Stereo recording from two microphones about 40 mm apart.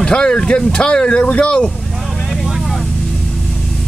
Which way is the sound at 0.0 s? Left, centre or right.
Left.